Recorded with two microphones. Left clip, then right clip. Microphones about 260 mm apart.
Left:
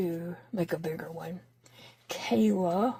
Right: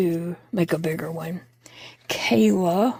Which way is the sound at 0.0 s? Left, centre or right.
Right.